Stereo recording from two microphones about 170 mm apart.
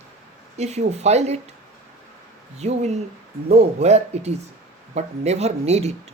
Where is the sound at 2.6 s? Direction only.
40° right (ahead or behind).